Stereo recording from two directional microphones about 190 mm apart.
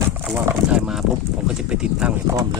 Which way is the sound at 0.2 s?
10° right (ahead or behind).